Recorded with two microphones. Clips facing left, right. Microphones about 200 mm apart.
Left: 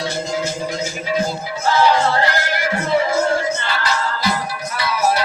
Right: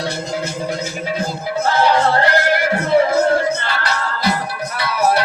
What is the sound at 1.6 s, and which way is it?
Music, 55° right (ahead or behind).